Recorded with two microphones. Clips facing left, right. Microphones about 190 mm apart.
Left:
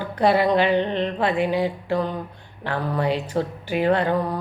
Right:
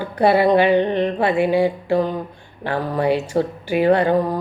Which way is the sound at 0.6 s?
10° right (ahead or behind).